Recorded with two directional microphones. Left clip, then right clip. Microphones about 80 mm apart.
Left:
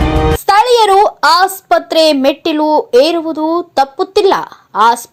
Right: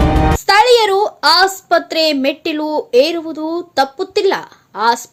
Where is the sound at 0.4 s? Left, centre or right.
Left.